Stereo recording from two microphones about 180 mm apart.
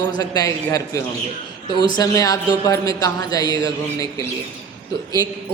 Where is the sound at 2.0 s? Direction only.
20° left (ahead or behind).